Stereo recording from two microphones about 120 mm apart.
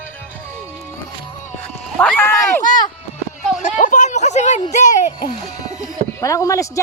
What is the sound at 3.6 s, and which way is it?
Speech, 90° left.